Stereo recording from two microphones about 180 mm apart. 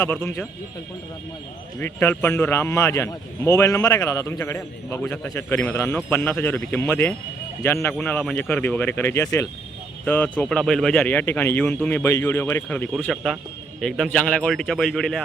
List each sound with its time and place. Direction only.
0.0 s a man's voice: 10° left (ahead or behind)
1.8 s a man's voice: 10° left (ahead or behind)